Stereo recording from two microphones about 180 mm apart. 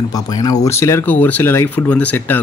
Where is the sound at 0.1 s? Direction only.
20° left (ahead or behind).